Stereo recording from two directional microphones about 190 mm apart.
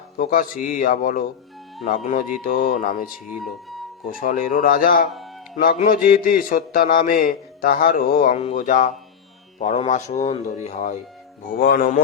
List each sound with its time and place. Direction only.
0.2 s a man's voice: 50° left (ahead or behind)
2.4 s a man's voice: 45° left (ahead or behind)
3.1 s speech: 5° right (ahead or behind)
4.0 s a man's voice: 45° left (ahead or behind)
11.4 s a man's voice: 50° left (ahead or behind)